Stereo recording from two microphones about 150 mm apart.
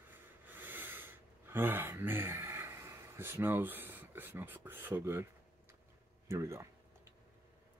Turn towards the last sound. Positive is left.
turn(degrees=-20)  # may be behind; listen again after turning